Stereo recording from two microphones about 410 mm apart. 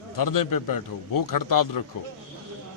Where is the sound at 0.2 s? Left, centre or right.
Left.